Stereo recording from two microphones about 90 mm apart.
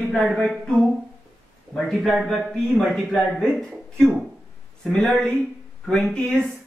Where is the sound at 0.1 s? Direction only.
Centre (ahead or behind).